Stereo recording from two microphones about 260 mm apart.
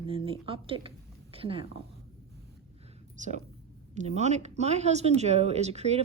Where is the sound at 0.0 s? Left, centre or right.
Right.